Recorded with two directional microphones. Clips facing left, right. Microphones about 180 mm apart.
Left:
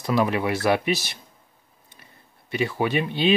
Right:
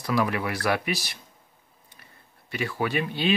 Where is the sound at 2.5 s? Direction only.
20° left (ahead or behind).